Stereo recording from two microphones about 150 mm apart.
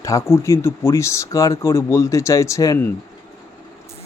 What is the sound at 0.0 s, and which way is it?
Speech, 20° left (ahead or behind).